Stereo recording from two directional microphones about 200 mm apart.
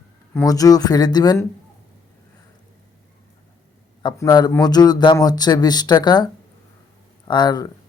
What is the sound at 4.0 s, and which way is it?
Speech, 20° left (ahead or behind).